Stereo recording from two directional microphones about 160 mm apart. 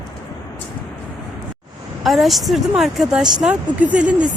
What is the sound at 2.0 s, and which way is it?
Speech, centre (ahead or behind).